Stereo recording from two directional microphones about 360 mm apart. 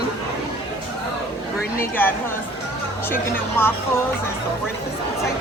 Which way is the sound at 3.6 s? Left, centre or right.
Centre.